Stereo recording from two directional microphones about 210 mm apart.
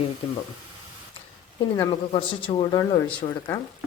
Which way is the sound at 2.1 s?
25° left (ahead or behind).